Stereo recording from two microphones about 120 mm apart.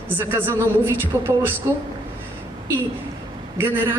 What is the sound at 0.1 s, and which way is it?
A woman's voice, 15° right (ahead or behind).